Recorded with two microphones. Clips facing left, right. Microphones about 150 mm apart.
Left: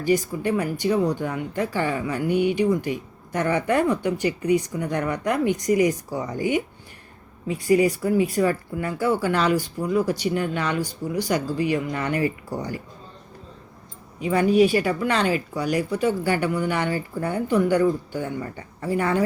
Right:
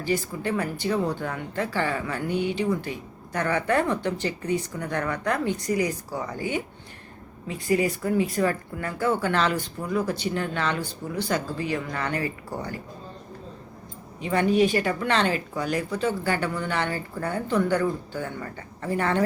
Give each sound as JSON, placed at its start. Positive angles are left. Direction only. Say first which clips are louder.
{"t": 0.0, "sound": "a woman's voice", "louder": "left 5 dB", "side_deg": 15}
{"t": 14.3, "sound": "a woman's voice", "louder": "left 3 dB", "side_deg": 10}